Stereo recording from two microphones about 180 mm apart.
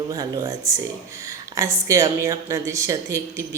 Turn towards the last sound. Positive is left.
turn(degrees=-15)  # may be behind; listen again after turning